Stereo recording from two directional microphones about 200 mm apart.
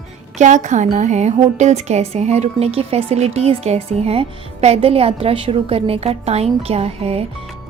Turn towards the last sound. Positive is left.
turn(degrees=-30)  # may be behind; listen again after turning